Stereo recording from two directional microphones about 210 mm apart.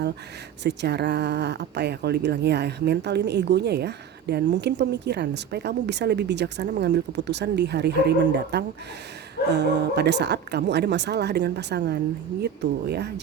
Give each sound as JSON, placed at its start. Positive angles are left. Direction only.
{"t": 0.6, "sound": "speech", "side_deg": -55}